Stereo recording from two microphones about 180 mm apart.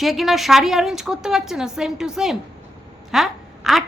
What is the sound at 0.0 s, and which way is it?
A woman's voice, centre (ahead or behind).